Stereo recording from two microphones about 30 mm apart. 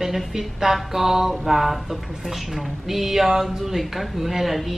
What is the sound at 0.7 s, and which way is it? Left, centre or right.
A woman's voice, centre.